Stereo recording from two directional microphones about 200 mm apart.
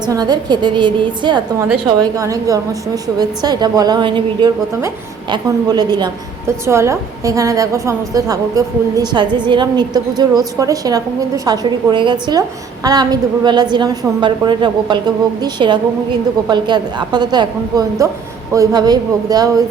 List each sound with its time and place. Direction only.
0.0 s a woman's voice: 20° right (ahead or behind)